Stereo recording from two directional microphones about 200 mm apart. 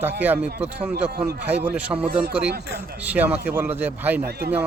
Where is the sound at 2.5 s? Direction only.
55° right (ahead or behind).